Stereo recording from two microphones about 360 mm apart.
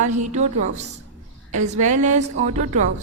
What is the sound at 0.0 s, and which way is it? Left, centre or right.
A woman's voice, centre.